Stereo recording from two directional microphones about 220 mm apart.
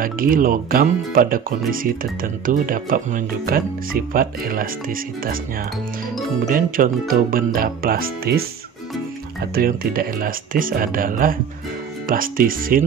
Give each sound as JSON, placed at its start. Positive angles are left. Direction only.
{"t": 0.0, "sound": "speech", "side_deg": -40}